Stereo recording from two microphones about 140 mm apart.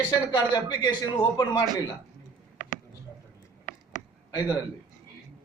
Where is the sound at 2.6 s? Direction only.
60° left (ahead or behind).